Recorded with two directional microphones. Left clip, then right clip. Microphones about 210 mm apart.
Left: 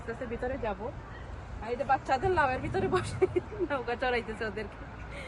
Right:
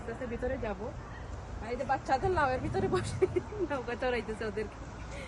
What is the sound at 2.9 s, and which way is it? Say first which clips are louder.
Speech: left 3 dB; 20° left (ahead or behind).